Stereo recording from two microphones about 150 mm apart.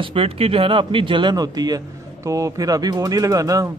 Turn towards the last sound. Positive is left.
turn(degrees=-25)  # may be behind; listen again after turning